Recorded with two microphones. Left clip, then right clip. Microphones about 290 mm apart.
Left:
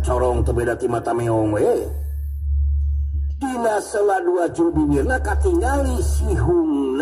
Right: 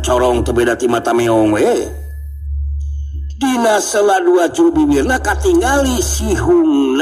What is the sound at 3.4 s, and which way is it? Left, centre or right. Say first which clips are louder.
A man's voice: right 7 dB; right.